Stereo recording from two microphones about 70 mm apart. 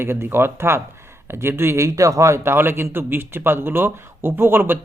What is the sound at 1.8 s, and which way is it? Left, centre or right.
A man's voice, right.